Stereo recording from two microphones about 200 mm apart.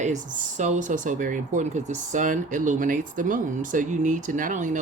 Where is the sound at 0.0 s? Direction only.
35° right (ahead or behind).